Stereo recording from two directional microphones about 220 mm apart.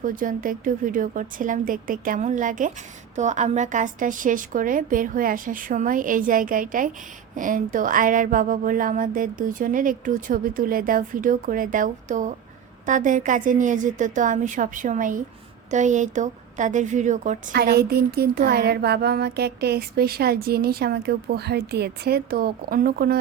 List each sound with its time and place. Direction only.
0.0 s speech: 40° right (ahead or behind)
17.5 s speech: 45° right (ahead or behind)